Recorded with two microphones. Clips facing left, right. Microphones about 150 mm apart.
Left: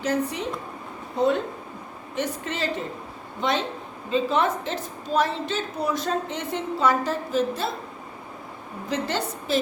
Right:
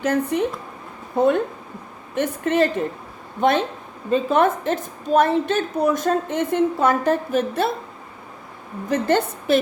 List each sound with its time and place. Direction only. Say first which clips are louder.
0.0 s a woman's voice: right 5 dB; 55° right (ahead or behind)
8.9 s a woman's voice: right 8 dB; 55° right (ahead or behind)